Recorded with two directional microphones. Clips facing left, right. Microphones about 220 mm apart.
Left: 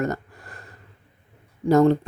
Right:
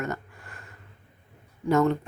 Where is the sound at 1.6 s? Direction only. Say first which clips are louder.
Left 6 dB; 35° left (ahead or behind).